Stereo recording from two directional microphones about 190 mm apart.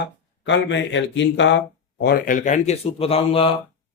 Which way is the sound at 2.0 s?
50° left (ahead or behind).